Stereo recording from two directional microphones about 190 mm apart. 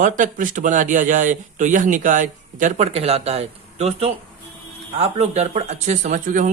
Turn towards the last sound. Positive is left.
turn(degrees=-40)  # may be behind; listen again after turning